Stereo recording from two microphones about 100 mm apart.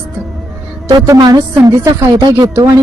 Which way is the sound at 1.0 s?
35° right (ahead or behind).